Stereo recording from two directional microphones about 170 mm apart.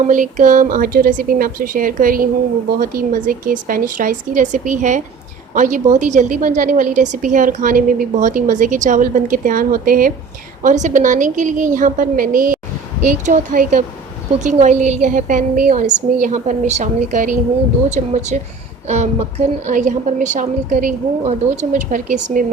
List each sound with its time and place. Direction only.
0.1 s a woman's voice: 50° right (ahead or behind)